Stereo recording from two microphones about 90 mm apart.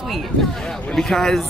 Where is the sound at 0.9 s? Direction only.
5° left (ahead or behind).